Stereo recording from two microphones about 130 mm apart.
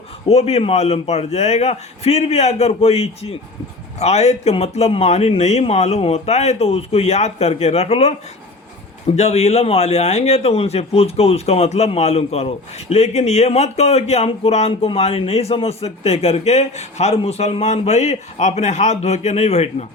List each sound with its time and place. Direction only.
0.3 s speech: 55° left (ahead or behind)
9.1 s a man's voice: 55° left (ahead or behind)